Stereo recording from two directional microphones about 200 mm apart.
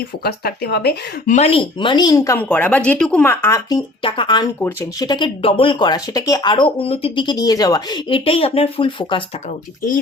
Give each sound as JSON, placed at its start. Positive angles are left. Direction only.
{"t": 0.2, "sound": "speech", "side_deg": 50}
{"t": 1.3, "sound": "speech", "side_deg": 30}